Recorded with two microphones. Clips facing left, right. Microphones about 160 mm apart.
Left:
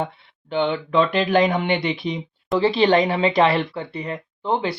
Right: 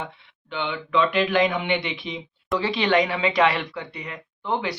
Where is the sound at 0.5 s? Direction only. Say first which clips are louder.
Left 5 dB; 40° left (ahead or behind).